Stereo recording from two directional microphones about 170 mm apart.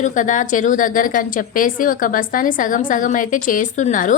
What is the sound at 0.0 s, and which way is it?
A woman's voice, 50° left (ahead or behind).